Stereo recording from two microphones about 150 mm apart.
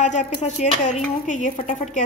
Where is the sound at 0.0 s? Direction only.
50° left (ahead or behind).